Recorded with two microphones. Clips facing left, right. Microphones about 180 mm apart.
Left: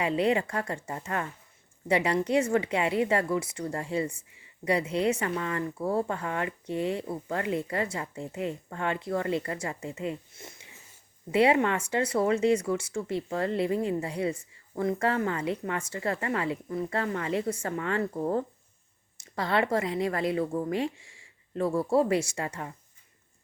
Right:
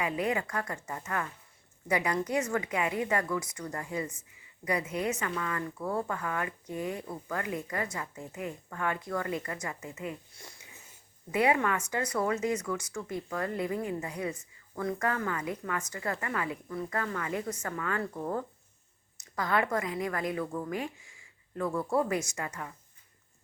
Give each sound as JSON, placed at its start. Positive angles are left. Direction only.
{"t": 0.0, "sound": "speech", "side_deg": 30}